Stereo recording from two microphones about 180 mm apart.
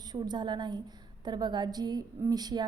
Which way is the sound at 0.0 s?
25° right (ahead or behind).